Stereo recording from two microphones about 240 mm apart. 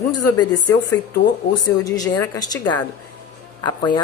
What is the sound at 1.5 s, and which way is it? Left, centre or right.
A woman's voice, centre.